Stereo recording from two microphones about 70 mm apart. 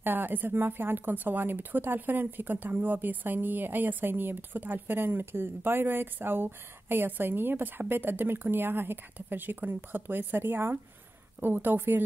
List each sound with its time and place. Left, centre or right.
0.0 s a woman's voice: right